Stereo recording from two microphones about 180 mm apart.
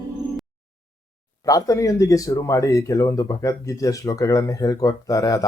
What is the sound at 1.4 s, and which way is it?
Speech, 20° left (ahead or behind).